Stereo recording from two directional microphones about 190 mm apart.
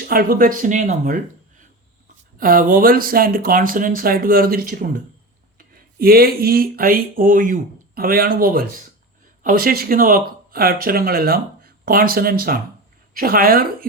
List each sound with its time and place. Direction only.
0.1 s speech: 50° right (ahead or behind)